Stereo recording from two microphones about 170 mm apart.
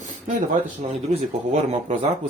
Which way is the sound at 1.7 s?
45° right (ahead or behind).